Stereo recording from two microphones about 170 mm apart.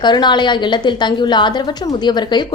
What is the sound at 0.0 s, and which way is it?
A woman's voice, 25° left (ahead or behind).